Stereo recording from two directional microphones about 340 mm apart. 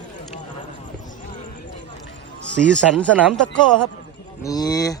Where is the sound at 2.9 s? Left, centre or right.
Centre.